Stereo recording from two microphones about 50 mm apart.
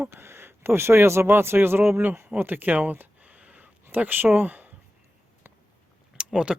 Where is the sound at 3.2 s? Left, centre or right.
Right.